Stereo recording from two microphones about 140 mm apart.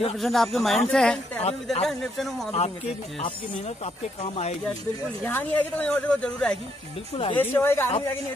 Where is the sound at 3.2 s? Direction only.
40° left (ahead or behind).